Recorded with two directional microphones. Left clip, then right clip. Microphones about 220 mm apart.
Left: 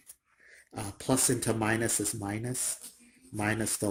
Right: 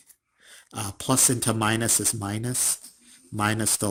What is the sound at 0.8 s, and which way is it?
Speech, 45° right (ahead or behind).